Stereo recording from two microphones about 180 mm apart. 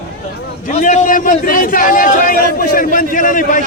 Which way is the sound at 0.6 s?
45° left (ahead or behind).